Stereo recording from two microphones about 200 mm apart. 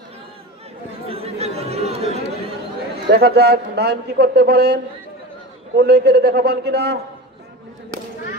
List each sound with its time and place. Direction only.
1.0 s speech: 30° right (ahead or behind)
3.1 s a man's voice: 50° right (ahead or behind)
5.8 s a man's voice: 55° right (ahead or behind)